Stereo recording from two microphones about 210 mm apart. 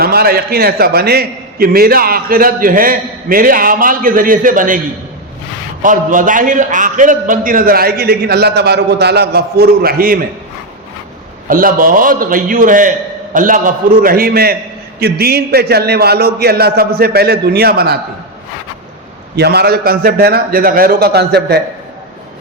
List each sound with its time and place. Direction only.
0.0 s a man's voice: 45° right (ahead or behind)
5.8 s a man's voice: 40° right (ahead or behind)
11.4 s a man's voice: 40° right (ahead or behind)
19.4 s a man's voice: 50° right (ahead or behind)